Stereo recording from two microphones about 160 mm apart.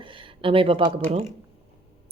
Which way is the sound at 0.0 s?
30° right (ahead or behind).